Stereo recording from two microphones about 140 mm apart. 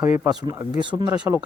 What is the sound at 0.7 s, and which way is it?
Speech, 35° right (ahead or behind).